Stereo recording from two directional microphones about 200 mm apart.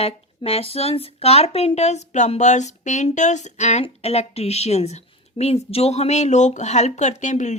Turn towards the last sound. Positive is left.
turn(degrees=35)  # may be behind; listen again after turning